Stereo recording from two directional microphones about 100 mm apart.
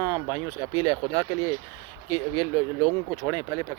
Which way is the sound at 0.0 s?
30° right (ahead or behind).